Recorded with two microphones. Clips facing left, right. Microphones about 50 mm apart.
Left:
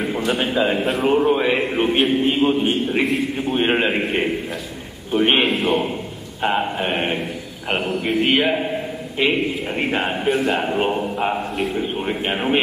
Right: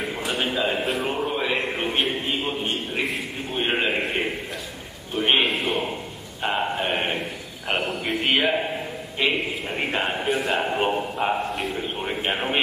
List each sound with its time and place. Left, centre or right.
0.3 s a man's voice: centre
1.1 s speech: centre
1.6 s a man's voice: centre
2.4 s speech: centre
3.0 s a man's voice: centre
3.5 s speech: centre
5.1 s a man's voice: centre
5.4 s a sound: centre
6.4 s a man's voice: centre